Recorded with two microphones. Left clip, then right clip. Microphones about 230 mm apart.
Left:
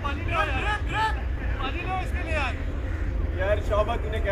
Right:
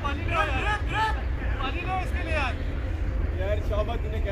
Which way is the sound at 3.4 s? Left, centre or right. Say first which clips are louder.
Left 5 dB; left.